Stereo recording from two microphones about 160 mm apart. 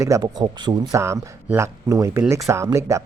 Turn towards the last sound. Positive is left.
turn(degrees=-20)  # may be behind; listen again after turning